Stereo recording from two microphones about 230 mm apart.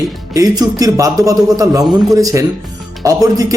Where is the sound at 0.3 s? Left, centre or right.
Centre.